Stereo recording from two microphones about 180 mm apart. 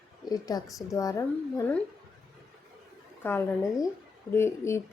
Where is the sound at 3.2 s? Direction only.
10° left (ahead or behind).